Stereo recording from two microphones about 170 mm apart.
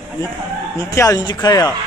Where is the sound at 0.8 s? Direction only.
20° left (ahead or behind).